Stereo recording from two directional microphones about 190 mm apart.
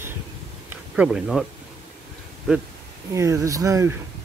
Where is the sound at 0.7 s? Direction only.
5° right (ahead or behind).